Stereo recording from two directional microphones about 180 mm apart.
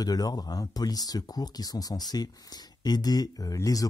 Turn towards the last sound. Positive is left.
turn(degrees=20)  # may be behind; listen again after turning